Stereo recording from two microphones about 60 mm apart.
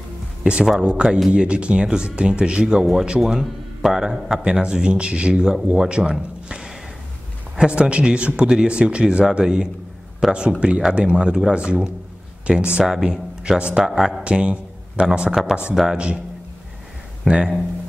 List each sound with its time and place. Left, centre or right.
0.4 s speech: centre
13.8 s speech: centre
14.2 s speech: centre
17.3 s speech: centre